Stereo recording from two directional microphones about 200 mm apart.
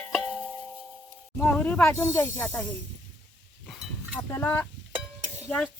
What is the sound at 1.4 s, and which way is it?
Speech, 5° left (ahead or behind).